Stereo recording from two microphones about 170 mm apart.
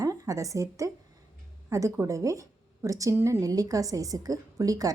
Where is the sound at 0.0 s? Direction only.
20° right (ahead or behind).